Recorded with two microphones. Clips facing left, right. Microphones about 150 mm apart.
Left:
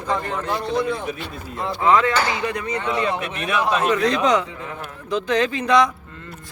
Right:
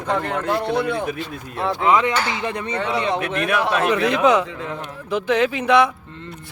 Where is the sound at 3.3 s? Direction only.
70° right (ahead or behind).